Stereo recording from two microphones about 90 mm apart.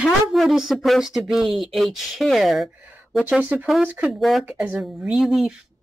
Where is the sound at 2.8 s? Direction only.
20° right (ahead or behind).